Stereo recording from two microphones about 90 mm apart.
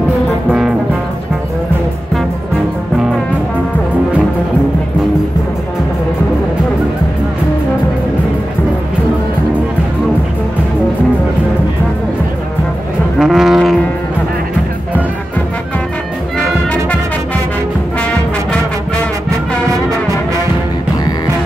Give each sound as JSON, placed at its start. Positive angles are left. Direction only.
{"t": 0.5, "sound": "brass instrument", "side_deg": -10}
{"t": 13.2, "sound": "brass instrument", "side_deg": -5}